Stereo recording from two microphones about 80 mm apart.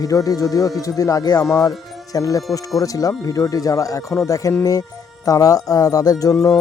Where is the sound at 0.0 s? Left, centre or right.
Left.